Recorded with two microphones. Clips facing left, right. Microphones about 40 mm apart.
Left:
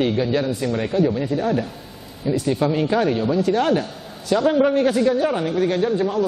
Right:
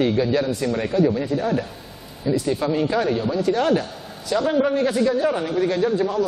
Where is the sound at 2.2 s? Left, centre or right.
Left.